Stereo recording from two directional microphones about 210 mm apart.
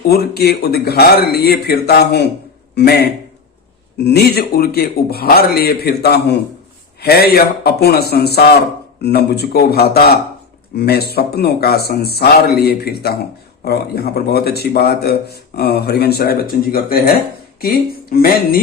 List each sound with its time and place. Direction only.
0.1 s speech: 50° left (ahead or behind)